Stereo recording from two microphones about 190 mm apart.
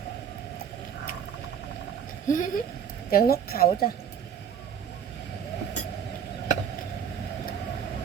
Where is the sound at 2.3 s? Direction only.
45° left (ahead or behind).